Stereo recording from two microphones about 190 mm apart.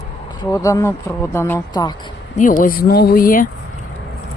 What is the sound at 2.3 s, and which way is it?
Speech, 45° left (ahead or behind).